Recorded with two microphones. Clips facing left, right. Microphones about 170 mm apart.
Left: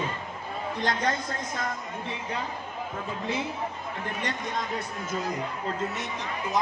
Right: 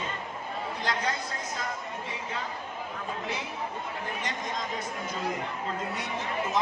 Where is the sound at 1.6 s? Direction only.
55° left (ahead or behind).